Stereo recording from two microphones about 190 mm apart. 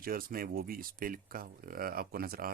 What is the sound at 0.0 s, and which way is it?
Speech, 50° right (ahead or behind).